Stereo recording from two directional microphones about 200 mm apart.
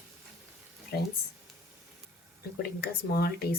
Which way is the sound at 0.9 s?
50° left (ahead or behind).